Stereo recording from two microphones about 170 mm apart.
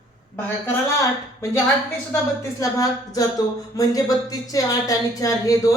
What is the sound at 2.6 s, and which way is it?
Speech, 20° left (ahead or behind).